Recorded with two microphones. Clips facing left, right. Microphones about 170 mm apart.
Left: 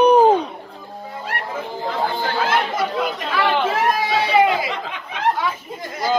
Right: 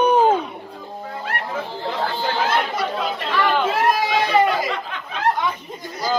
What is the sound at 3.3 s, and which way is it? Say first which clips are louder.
Speech: even; 10° left (ahead or behind).